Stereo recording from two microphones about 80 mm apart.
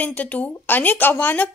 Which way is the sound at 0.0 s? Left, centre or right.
Centre.